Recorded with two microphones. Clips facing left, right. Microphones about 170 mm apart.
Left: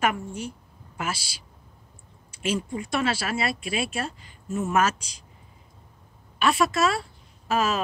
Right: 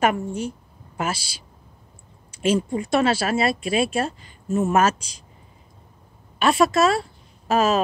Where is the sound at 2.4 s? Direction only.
30° right (ahead or behind).